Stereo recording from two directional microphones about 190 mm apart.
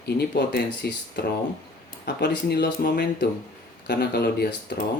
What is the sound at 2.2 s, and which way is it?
Speech, 60° left (ahead or behind).